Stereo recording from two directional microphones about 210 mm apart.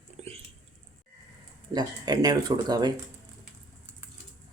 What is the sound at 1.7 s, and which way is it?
Speech, 20° right (ahead or behind).